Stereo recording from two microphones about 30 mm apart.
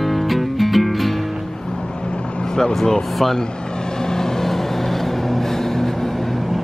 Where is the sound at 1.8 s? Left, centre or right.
Left.